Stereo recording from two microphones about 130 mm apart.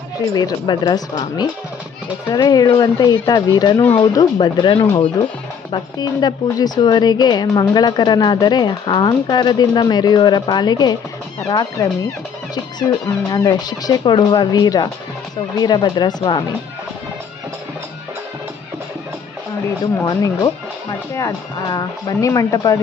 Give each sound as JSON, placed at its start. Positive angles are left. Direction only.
{"t": 0.3, "sound": "a woman's voice", "side_deg": 30}
{"t": 13.3, "sound": "a woman's voice", "side_deg": 30}
{"t": 20.1, "sound": "speech", "side_deg": 30}